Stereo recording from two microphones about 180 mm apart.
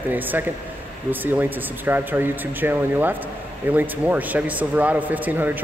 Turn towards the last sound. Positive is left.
turn(degrees=-10)  # may be behind; listen again after turning